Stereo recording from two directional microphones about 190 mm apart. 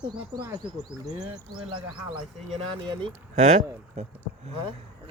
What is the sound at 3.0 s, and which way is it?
Speech, 40° right (ahead or behind).